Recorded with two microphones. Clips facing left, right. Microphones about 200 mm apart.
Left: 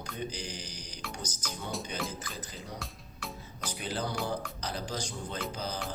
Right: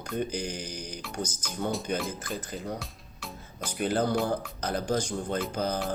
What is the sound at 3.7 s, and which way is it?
Speech, 55° right (ahead or behind).